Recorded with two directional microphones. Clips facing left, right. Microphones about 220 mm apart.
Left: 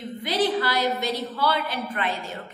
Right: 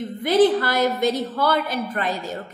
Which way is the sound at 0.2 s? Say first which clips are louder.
Right 7 dB; 50° right (ahead or behind).